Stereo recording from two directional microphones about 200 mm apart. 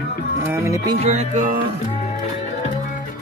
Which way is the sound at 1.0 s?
35° right (ahead or behind).